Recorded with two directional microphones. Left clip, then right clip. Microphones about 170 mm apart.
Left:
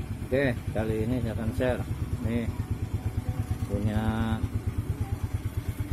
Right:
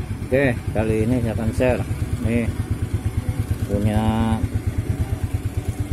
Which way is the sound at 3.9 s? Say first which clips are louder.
Right 9 dB; 10° right (ahead or behind).